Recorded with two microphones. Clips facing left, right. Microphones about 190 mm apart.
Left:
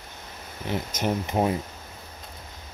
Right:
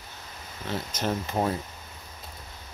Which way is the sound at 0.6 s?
15° left (ahead or behind).